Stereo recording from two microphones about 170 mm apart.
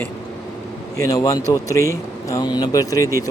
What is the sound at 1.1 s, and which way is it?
A man's voice, 20° left (ahead or behind).